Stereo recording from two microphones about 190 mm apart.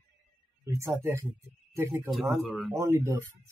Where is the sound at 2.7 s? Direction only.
15° right (ahead or behind).